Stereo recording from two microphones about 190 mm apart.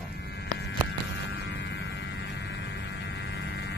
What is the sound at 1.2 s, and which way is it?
Mains hum, 65° left (ahead or behind).